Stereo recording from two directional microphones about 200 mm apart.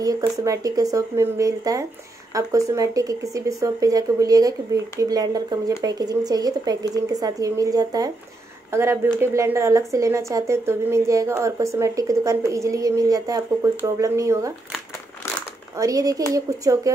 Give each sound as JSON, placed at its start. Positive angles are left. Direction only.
{"t": 0.0, "sound": "speech", "side_deg": -15}
{"t": 15.8, "sound": "speech", "side_deg": -15}